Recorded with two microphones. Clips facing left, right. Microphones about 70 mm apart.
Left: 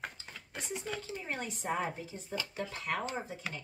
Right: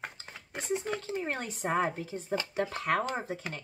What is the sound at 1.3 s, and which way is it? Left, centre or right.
Speech, right.